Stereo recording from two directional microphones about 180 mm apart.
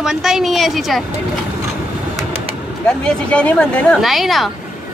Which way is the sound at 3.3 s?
5° left (ahead or behind).